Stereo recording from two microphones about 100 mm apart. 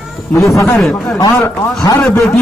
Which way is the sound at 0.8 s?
5° left (ahead or behind).